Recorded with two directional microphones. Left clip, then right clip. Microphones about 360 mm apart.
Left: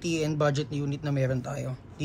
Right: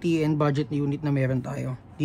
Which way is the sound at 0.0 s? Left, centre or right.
Right.